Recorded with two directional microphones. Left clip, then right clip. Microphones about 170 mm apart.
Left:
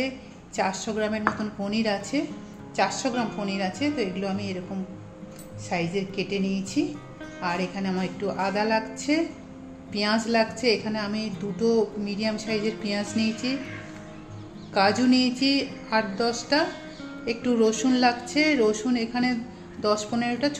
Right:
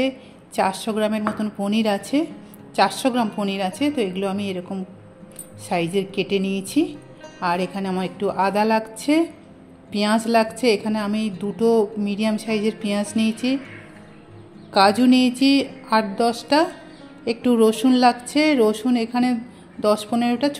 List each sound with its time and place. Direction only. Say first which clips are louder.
0.6 s a woman's voice: right 5 dB; 40° right (ahead or behind)
5.7 s a woman's voice: right 6 dB; 50° right (ahead or behind)
14.7 s a woman's voice: right 6 dB; 40° right (ahead or behind)